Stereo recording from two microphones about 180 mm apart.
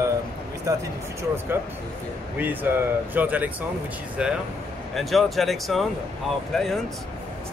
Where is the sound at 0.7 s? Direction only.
20° right (ahead or behind).